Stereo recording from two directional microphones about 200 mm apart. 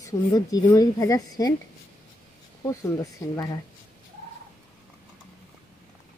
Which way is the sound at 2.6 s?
15° left (ahead or behind).